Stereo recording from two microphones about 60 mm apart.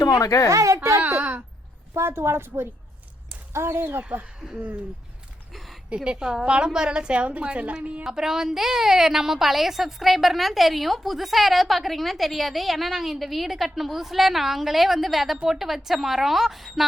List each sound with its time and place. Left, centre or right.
0.0 s speech: left
0.5 s a sound: right
2.0 s a woman's voice: right
6.1 s a woman's voice: centre
8.0 s a woman's voice: centre